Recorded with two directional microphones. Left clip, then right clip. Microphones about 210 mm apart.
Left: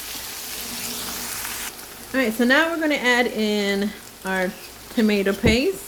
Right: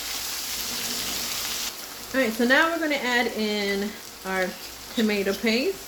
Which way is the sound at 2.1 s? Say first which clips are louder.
Left 2 dB; 35° left (ahead or behind).